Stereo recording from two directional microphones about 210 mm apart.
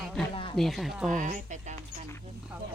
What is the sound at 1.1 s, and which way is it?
Speech, 40° right (ahead or behind).